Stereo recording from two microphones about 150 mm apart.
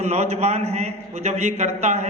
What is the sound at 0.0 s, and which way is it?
A man's voice, 45° right (ahead or behind).